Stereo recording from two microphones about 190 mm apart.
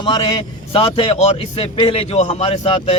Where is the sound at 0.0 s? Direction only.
25° left (ahead or behind).